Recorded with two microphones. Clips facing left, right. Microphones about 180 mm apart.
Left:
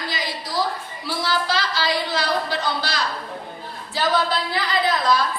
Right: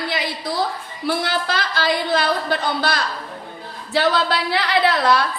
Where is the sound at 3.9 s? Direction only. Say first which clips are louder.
Right 3 dB; 70° right (ahead or behind).